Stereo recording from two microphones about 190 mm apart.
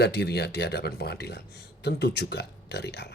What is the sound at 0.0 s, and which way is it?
Speech, 60° left (ahead or behind).